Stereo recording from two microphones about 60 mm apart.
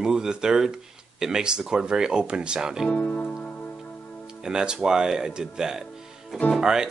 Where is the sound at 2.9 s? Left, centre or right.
Left.